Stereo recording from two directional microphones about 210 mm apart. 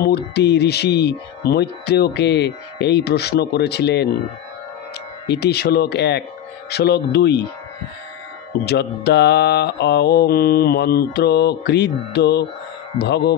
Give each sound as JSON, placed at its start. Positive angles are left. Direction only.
{"t": 0.0, "sound": "speech", "side_deg": 50}
{"t": 5.3, "sound": "speech", "side_deg": 50}
{"t": 8.6, "sound": "speech", "side_deg": 50}